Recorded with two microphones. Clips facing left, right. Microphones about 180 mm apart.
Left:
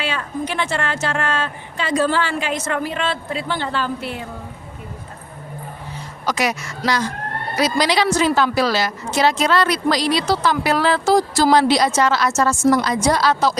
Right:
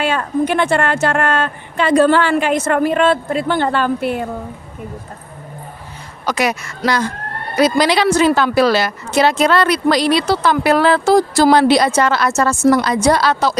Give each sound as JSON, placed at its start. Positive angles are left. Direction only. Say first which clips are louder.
{"t": 0.0, "sound": "a woman's voice", "louder": "right 8 dB", "side_deg": -50}
{"t": 6.2, "sound": "a woman's voice", "louder": "right 3 dB", "side_deg": -60}